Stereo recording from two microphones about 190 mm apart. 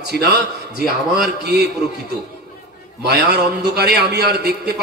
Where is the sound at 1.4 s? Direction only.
60° right (ahead or behind).